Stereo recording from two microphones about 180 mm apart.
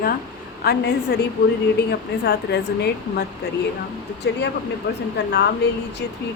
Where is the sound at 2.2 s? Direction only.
65° left (ahead or behind).